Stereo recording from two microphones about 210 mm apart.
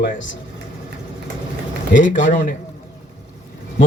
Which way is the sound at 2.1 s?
35° left (ahead or behind).